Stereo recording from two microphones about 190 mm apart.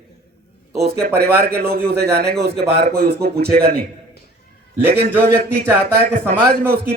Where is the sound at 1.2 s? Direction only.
55° right (ahead or behind).